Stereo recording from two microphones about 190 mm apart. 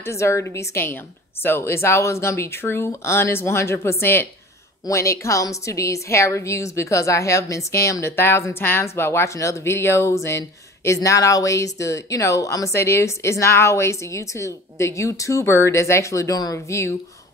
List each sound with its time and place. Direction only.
0.0 s a woman's voice: 15° left (ahead or behind)